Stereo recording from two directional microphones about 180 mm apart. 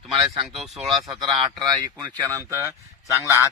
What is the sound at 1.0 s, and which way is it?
Speech, 25° right (ahead or behind).